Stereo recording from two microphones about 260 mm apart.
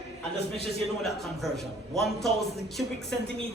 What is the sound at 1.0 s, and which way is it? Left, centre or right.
A man's voice, centre.